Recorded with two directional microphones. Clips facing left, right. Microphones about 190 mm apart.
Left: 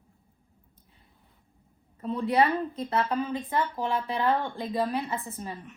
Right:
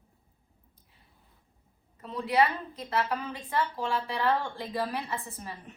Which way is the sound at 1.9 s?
30° left (ahead or behind).